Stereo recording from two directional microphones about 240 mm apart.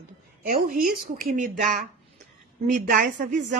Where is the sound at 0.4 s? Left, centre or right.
Right.